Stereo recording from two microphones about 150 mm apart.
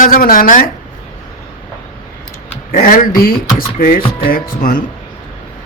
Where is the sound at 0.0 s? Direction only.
70° left (ahead or behind).